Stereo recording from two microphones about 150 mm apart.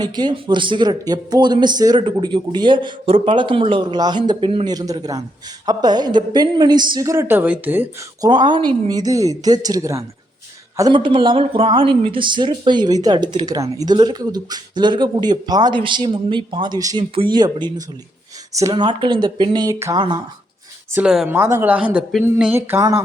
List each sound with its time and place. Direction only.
0.0 s a man's voice: 30° right (ahead or behind); by 7.9 s 10° right (ahead or behind)
8.2 s a man's voice: 30° right (ahead or behind)
20.9 s speech: 5° right (ahead or behind)
21.3 s speech: 15° right (ahead or behind)